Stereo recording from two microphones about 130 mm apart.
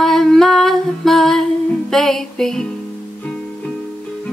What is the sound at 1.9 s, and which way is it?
Music, 5° left (ahead or behind).